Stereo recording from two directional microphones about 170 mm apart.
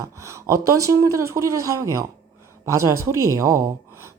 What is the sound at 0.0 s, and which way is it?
Speech, 15° right (ahead or behind).